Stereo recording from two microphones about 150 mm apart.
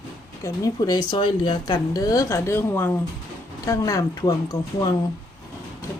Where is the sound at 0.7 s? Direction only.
30° left (ahead or behind).